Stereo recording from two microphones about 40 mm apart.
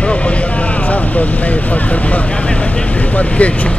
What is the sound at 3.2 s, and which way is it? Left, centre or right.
Speech, left.